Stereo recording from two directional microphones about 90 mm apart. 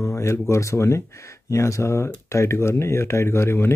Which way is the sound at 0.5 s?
30° left (ahead or behind).